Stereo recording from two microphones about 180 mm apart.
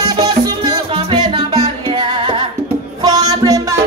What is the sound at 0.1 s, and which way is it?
Music, 25° right (ahead or behind).